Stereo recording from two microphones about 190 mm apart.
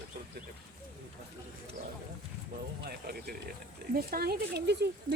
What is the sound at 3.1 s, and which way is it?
Speech, 55° right (ahead or behind).